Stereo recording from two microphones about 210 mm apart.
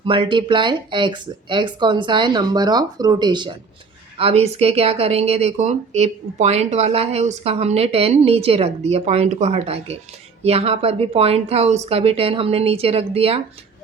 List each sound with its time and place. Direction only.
0.0 s speech: 25° right (ahead or behind)